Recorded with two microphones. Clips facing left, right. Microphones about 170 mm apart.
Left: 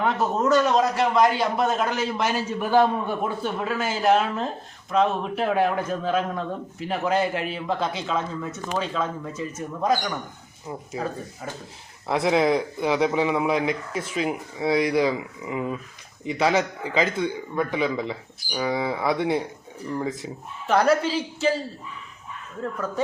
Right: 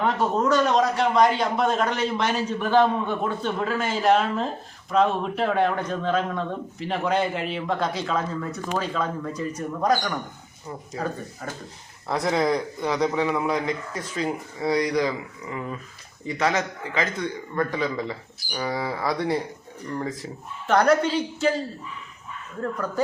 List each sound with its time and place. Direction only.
0.0 s a man's voice: centre (ahead or behind)